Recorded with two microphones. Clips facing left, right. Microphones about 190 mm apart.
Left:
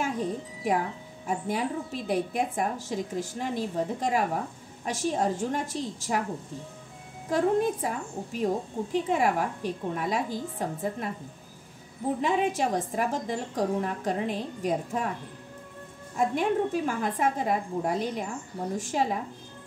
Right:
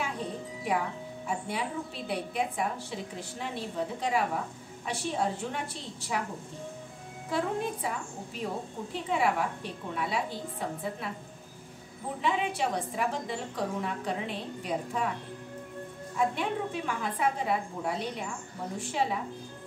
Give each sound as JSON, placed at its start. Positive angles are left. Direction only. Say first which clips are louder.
{"t": 1.2, "sound": "a woman's voice", "louder": "left 5 dB", "side_deg": 45}
{"t": 7.2, "sound": "a woman's voice", "louder": "left 7 dB", "side_deg": 45}
{"t": 12.2, "sound": "a woman's voice", "louder": "left 2 dB", "side_deg": 45}
{"t": 16.2, "sound": "a woman's voice", "louder": "left 5 dB", "side_deg": 45}